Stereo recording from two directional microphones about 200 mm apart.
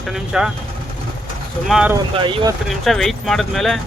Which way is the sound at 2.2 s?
25° right (ahead or behind).